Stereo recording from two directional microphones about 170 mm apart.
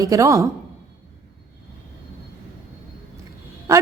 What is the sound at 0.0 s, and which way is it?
Speech, 20° right (ahead or behind).